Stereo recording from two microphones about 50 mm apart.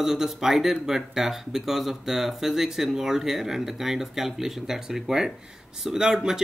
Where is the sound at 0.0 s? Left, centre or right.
Centre.